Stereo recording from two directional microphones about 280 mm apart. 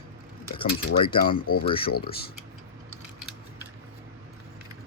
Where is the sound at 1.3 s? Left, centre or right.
Left.